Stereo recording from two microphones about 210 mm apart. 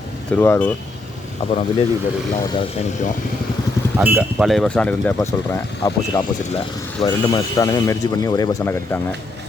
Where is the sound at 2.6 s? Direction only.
30° left (ahead or behind).